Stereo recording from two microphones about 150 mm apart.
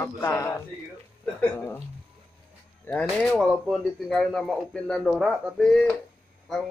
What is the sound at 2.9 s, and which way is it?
A man's voice, 5° left (ahead or behind).